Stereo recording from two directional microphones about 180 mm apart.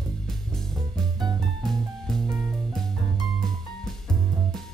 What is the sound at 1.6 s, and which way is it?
Music, centre (ahead or behind).